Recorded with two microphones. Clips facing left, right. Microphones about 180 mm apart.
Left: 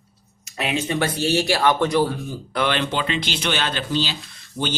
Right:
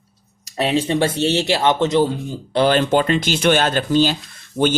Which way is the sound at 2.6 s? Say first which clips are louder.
Right 7 dB; 40° right (ahead or behind).